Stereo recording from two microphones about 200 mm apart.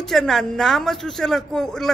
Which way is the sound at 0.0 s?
Centre (ahead or behind).